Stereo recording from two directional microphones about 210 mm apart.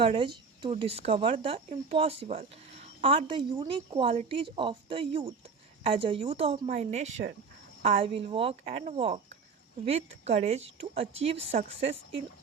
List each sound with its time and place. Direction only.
0.0 s speech: 25° right (ahead or behind)